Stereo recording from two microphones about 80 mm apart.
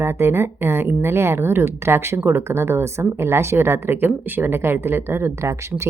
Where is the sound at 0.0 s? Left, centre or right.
Right.